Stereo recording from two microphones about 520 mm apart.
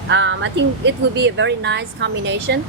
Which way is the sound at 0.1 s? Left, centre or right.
Right.